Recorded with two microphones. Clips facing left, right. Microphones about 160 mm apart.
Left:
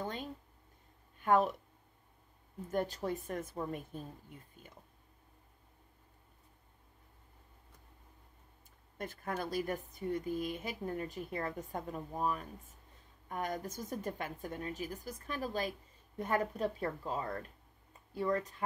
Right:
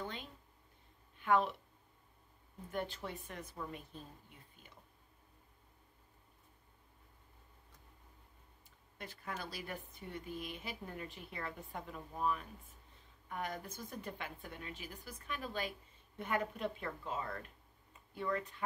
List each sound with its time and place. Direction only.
0.0 s a sound: 45° left (ahead or behind)
1.2 s speech: 45° left (ahead or behind)
2.7 s speech: 40° left (ahead or behind)
8.9 s a woman's voice: 45° left (ahead or behind)